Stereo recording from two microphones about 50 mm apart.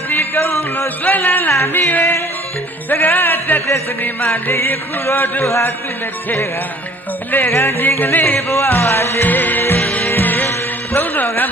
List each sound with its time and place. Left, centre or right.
0.1 s music: left
1.5 s music: left
1.7 s music: left
4.5 s music: left
7.4 s music: left
7.8 s music: left
8.4 s music: left
9.2 s music: left